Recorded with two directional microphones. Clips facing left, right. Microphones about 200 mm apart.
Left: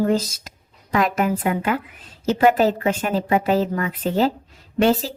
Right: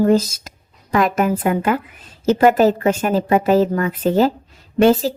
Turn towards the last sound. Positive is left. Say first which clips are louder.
# right 5 dB
turn(degrees=-45)  # may be behind; listen again after turning